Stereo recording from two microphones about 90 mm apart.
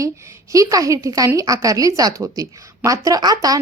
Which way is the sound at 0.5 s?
40° right (ahead or behind).